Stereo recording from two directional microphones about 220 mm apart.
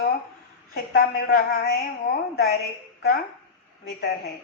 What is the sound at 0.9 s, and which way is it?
Speech, 40° left (ahead or behind).